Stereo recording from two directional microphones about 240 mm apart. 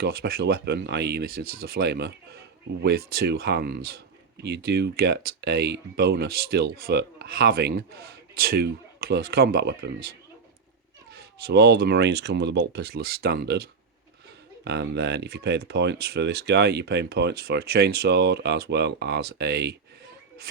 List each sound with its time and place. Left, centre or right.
0.0 s speech: right
11.4 s speech: right